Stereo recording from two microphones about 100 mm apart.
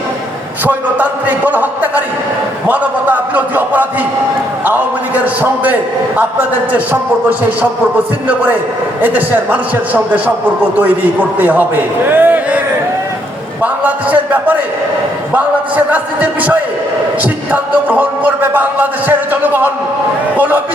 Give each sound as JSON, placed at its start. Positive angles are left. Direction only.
{"t": 0.6, "sound": "music", "side_deg": -15}
{"t": 2.6, "sound": "a man's voice", "side_deg": -15}
{"t": 4.6, "sound": "music", "side_deg": -15}
{"t": 6.7, "sound": "music", "side_deg": -15}
{"t": 9.0, "sound": "music", "side_deg": -20}
{"t": 11.3, "sound": "a man's voice", "side_deg": -20}
{"t": 12.0, "sound": "a sound", "side_deg": -20}
{"t": 15.4, "sound": "music", "side_deg": -15}